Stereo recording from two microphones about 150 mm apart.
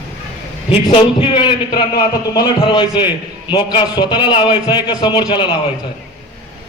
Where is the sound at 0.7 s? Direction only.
35° left (ahead or behind).